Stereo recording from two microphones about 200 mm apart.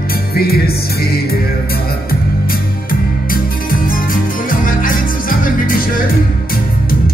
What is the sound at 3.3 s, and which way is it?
Music, 45° left (ahead or behind).